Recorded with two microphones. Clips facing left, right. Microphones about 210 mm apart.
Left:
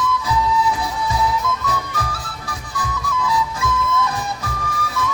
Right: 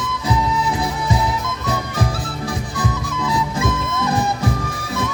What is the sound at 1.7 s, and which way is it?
Music, 20° right (ahead or behind).